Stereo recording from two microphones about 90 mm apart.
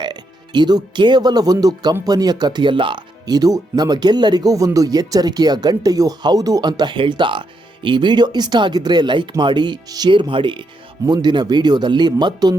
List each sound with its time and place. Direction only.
0.0 s speech: 55° right (ahead or behind)
3.2 s speech: 45° right (ahead or behind)
10.1 s speech: 65° right (ahead or behind)
11.0 s speech: 50° right (ahead or behind)